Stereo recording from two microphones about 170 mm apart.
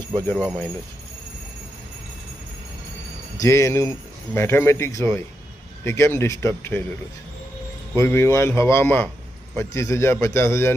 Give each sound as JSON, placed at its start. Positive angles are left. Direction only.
{"t": 0.2, "sound": "speech", "side_deg": 10}
{"t": 3.3, "sound": "speech", "side_deg": 20}
{"t": 7.9, "sound": "speech", "side_deg": 15}